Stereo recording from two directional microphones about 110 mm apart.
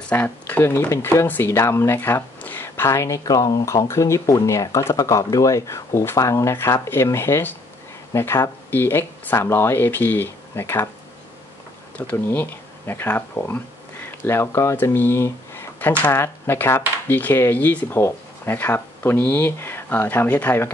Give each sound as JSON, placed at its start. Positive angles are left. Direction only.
{"t": 0.1, "sound": "speech", "side_deg": 15}
{"t": 12.0, "sound": "speech", "side_deg": 15}